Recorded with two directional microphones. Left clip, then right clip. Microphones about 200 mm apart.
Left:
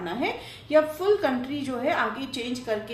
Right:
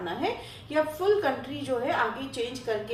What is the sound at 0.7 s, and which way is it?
A woman's voice, 40° left (ahead or behind).